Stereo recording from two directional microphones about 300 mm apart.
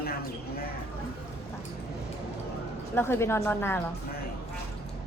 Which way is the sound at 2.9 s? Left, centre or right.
Centre.